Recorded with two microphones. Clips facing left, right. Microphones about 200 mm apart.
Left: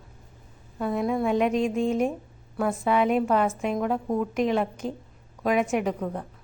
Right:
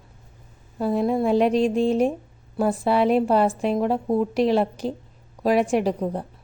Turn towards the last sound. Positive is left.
turn(degrees=-35)  # may be behind; listen again after turning